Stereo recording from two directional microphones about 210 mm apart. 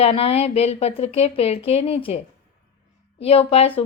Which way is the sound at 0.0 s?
30° left (ahead or behind).